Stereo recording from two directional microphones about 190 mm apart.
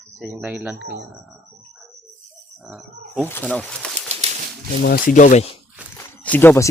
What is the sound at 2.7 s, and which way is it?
Speech, 5° right (ahead or behind).